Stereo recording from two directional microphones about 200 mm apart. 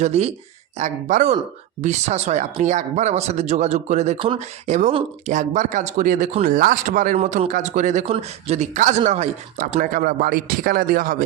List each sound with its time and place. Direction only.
0.0 s speech: 30° right (ahead or behind)